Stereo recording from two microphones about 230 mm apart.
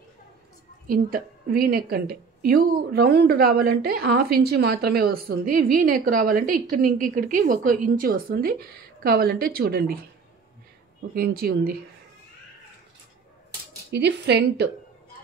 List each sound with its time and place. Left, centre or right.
0.8 s a woman's voice: right
11.1 s a woman's voice: right
13.9 s a woman's voice: right